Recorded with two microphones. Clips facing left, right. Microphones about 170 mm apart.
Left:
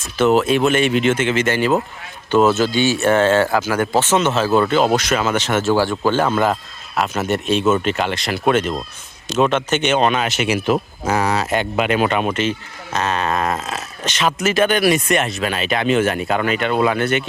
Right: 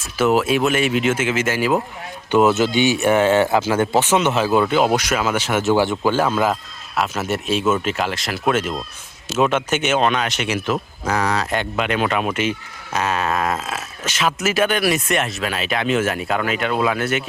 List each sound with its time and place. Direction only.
0.0 s speech: 10° right (ahead or behind)
2.3 s speech: 15° right (ahead or behind)
4.0 s speech: 15° right (ahead or behind)
6.1 s speech: 5° right (ahead or behind)